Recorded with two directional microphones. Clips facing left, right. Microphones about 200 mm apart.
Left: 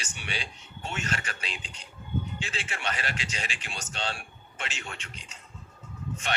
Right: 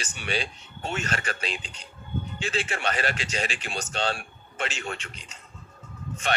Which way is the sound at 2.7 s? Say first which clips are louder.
Right 6 dB; 50° right (ahead or behind).